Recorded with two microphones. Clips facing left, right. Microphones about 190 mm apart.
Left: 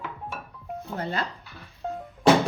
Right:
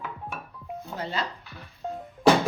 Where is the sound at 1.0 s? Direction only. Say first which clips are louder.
Left 1 dB; 50° left (ahead or behind).